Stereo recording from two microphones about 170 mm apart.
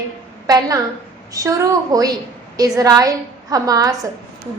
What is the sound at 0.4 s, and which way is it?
A woman's voice, 20° right (ahead or behind).